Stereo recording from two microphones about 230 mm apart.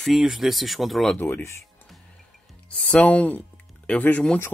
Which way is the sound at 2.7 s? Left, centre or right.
Centre.